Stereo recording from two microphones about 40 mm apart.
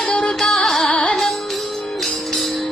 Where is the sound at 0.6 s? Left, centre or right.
Centre.